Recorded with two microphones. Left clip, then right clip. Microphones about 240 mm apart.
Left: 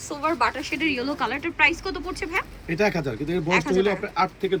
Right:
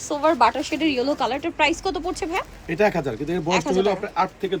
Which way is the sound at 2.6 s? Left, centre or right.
Centre.